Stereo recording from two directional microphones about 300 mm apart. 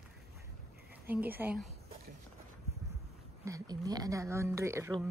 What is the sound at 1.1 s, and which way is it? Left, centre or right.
Speech, centre.